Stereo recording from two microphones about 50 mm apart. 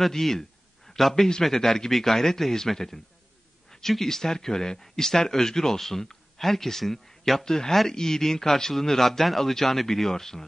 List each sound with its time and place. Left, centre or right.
0.0 s speech: centre